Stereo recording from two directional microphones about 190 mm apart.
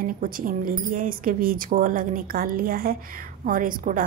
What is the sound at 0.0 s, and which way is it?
A woman's voice, 45° right (ahead or behind).